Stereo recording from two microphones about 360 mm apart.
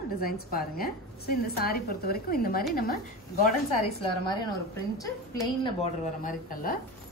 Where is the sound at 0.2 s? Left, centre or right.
Left.